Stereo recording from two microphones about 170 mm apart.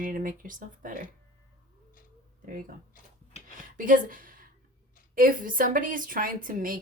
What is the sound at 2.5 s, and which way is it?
A woman's voice, 55° right (ahead or behind).